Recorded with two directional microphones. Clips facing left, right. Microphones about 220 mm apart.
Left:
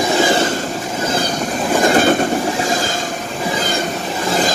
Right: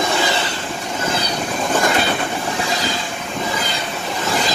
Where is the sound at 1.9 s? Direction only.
45° left (ahead or behind).